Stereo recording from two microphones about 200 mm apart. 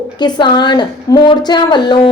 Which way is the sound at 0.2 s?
20° left (ahead or behind).